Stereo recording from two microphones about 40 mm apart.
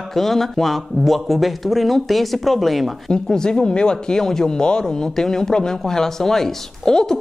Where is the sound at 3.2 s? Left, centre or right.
Centre.